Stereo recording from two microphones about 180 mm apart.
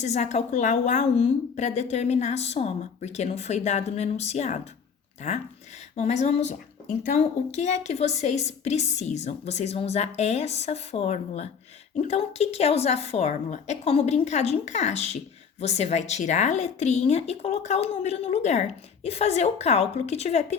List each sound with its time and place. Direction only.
0.0 s a woman's voice: 40° left (ahead or behind)